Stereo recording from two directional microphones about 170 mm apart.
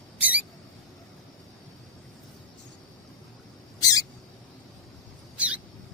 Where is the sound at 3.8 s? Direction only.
20° left (ahead or behind).